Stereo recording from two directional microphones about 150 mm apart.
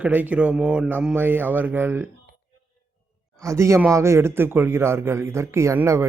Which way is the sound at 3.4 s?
20° right (ahead or behind).